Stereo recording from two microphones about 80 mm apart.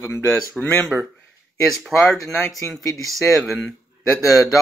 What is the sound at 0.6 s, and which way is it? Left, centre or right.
Speech, centre.